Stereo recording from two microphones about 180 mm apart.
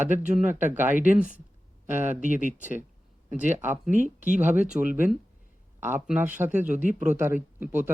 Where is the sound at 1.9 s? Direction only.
40° right (ahead or behind).